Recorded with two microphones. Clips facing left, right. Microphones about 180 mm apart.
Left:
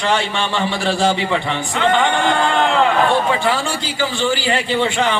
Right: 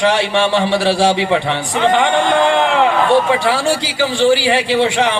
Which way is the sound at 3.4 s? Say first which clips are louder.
Right 4 dB; 80° right.